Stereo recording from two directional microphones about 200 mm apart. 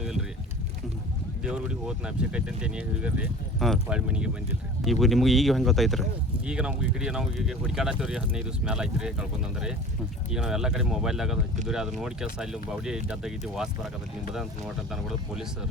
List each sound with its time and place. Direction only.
0.0 s boat: centre (ahead or behind)
1.5 s speech: 5° right (ahead or behind)